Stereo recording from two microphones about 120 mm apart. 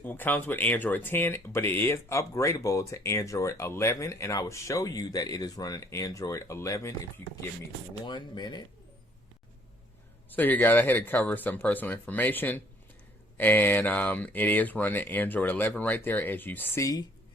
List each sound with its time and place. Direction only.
0.0 s speech: 15° left (ahead or behind)
8.0 s speech: 40° left (ahead or behind)
10.2 s speech: 15° left (ahead or behind)
16.8 s speech: 30° left (ahead or behind)